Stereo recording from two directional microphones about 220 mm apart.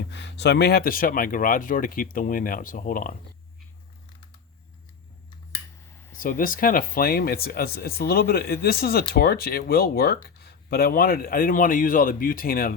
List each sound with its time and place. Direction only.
0.1 s speech: 50° left (ahead or behind)
5.9 s a sound: 10° left (ahead or behind)
6.1 s speech: 40° left (ahead or behind)